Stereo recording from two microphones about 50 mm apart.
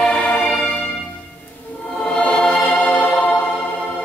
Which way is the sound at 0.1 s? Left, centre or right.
Left.